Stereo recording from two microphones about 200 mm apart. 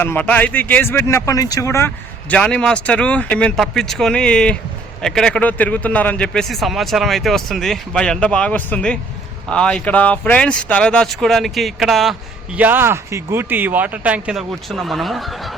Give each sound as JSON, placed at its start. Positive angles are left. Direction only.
{"t": 0.0, "sound": "speech", "side_deg": 10}